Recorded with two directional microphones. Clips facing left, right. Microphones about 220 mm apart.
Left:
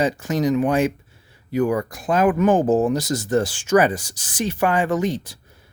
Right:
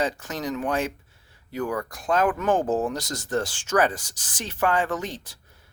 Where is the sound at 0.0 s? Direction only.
10° left (ahead or behind).